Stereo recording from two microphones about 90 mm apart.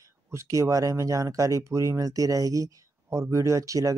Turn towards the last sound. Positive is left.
turn(degrees=-40)  # may be behind; listen again after turning